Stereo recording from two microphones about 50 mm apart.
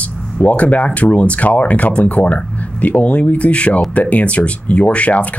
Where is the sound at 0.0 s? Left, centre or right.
Left.